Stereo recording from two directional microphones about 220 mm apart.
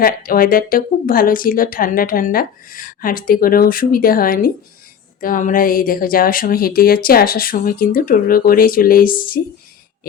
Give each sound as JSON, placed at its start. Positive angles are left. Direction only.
{"t": 0.0, "sound": "a woman's voice", "side_deg": 40}